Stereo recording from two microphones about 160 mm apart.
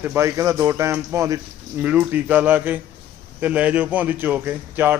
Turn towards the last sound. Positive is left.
turn(degrees=-10)  # may be behind; listen again after turning